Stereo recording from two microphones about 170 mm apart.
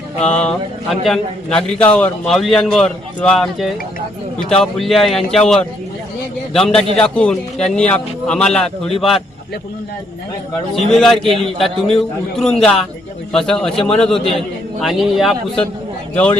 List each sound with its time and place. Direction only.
0.4 s a man's voice: centre (ahead or behind)
10.8 s a man's voice: centre (ahead or behind)